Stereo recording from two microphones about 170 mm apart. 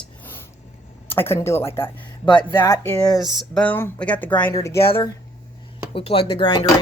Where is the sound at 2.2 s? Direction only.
25° left (ahead or behind).